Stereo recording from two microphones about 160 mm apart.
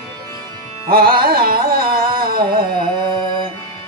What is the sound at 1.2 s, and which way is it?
Carnatic music, 65° right (ahead or behind).